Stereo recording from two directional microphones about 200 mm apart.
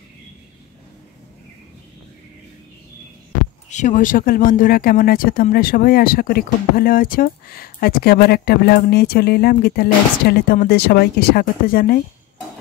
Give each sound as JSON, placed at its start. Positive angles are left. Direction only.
{"t": 3.7, "sound": "speech", "side_deg": 40}